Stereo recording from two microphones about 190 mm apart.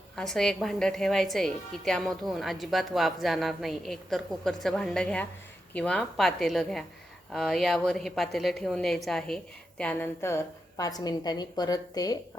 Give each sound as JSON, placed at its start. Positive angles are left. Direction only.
{"t": 0.2, "sound": "a woman's voice", "side_deg": 5}